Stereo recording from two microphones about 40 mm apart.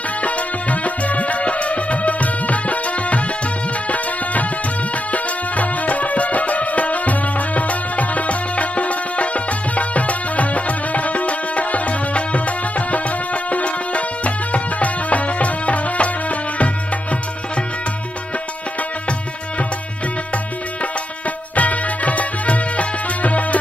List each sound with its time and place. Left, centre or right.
0.2 s music: left
21.5 s music: left